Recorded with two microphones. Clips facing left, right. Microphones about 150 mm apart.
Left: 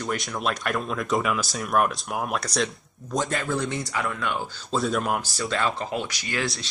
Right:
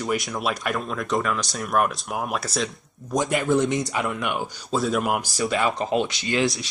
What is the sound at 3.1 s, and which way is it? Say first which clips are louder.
Speech: right 5 dB; 15° right (ahead or behind).